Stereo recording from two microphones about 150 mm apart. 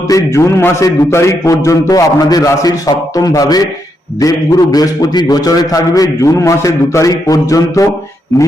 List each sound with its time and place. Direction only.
0.1 s a man's voice: 20° left (ahead or behind)